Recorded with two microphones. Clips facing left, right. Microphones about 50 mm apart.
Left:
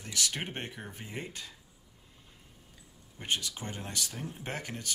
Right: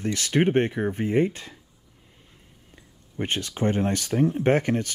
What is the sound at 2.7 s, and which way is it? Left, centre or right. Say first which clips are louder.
Speech: right 5 dB; right.